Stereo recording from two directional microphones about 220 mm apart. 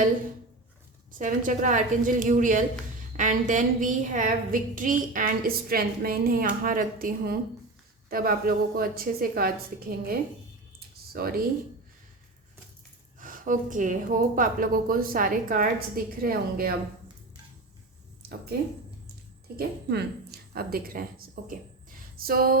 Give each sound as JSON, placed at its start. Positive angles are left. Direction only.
{"t": 1.2, "sound": "a woman's voice", "side_deg": -40}
{"t": 10.8, "sound": "computer keyboard", "side_deg": -45}
{"t": 13.1, "sound": "a woman's voice", "side_deg": -35}
{"t": 18.2, "sound": "a sound", "side_deg": -45}
{"t": 19.5, "sound": "speech", "side_deg": -45}